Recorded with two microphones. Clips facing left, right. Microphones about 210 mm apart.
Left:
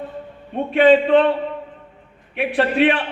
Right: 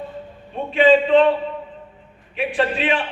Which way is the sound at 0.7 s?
65° left (ahead or behind).